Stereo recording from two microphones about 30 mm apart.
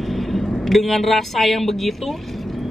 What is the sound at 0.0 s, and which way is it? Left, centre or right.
Vehicle, centre.